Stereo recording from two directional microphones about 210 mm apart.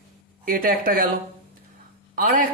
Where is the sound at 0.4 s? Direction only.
40° right (ahead or behind).